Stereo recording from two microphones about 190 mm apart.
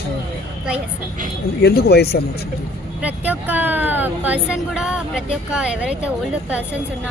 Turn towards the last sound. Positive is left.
turn(degrees=-5)  # may be behind; listen again after turning